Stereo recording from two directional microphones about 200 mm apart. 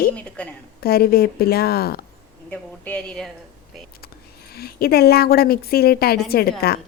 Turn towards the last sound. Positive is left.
turn(degrees=50)  # may be behind; listen again after turning